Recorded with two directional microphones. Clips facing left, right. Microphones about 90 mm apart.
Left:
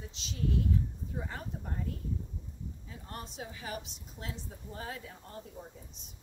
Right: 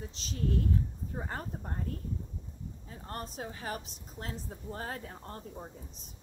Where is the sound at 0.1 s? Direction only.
40° right (ahead or behind).